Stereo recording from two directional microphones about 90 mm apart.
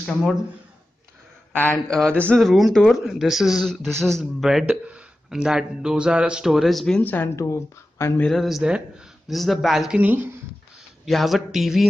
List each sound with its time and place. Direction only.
0.0 s speech: centre (ahead or behind)
1.5 s speech: 20° left (ahead or behind)
1.9 s a sound: 10° left (ahead or behind)
2.3 s speech: centre (ahead or behind)
7.0 s speech: 20° left (ahead or behind)
8.2 s speech: 5° left (ahead or behind)
9.9 s speech: 20° right (ahead or behind)
11.1 s speech: centre (ahead or behind)